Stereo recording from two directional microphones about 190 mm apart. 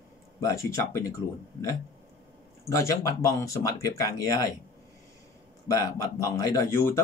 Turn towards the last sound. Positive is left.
turn(degrees=15)  # may be behind; listen again after turning